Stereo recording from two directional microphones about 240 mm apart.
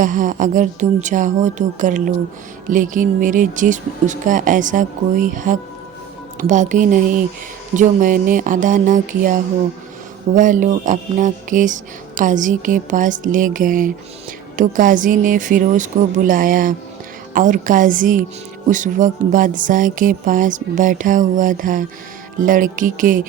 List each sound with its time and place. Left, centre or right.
0.0 s music: right